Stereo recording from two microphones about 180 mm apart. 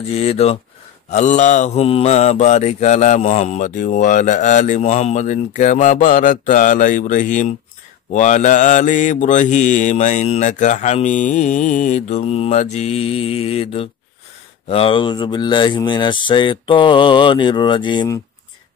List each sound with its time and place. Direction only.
0.1 s mantra: 35° left (ahead or behind)
14.7 s speech: 30° left (ahead or behind)